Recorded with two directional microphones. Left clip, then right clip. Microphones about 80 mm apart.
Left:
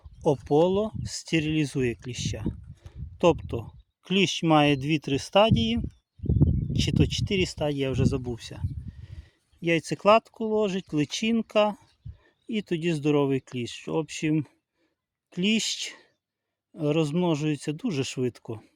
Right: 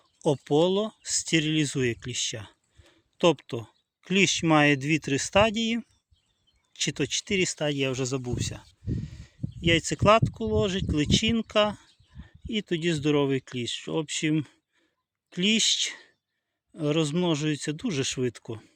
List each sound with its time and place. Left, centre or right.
0.2 s speech: left
7.7 s speech: left